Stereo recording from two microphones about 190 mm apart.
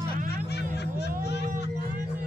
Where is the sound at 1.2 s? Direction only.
60° left (ahead or behind).